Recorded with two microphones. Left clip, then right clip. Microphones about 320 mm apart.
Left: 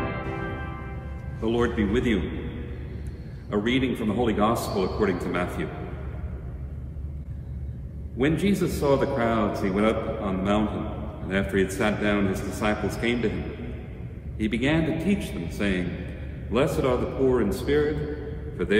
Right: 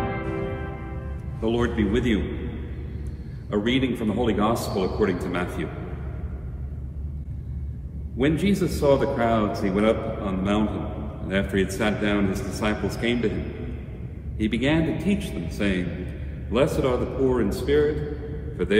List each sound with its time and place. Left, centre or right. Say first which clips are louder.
1.4 s a man's voice: right 1 dB; centre
3.4 s a man's voice: right 1 dB; centre
8.2 s a man's voice: right 1 dB; centre
14.4 s a man's voice: right 1 dB; centre